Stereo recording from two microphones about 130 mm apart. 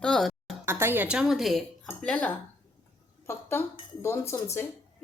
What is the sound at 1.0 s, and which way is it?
A woman's voice, 5° right (ahead or behind).